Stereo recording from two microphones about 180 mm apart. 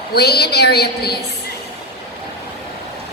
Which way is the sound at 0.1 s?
65° left (ahead or behind).